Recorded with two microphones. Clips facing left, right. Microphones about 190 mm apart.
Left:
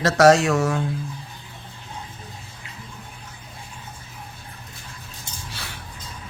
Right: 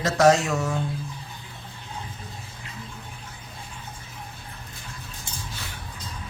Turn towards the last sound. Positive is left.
turn(degrees=80)